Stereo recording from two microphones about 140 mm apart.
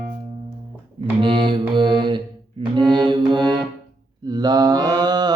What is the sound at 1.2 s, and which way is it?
Mantra, 35° right (ahead or behind).